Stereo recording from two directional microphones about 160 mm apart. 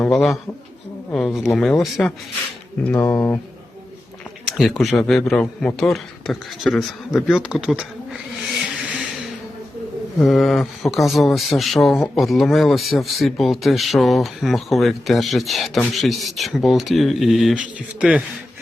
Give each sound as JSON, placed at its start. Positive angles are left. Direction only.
{"t": 0.0, "sound": "a man's voice", "side_deg": 0}
{"t": 3.1, "sound": "speech", "side_deg": 20}
{"t": 4.4, "sound": "a sound", "side_deg": 0}
{"t": 4.8, "sound": "speech", "side_deg": 0}
{"t": 10.2, "sound": "speech", "side_deg": 0}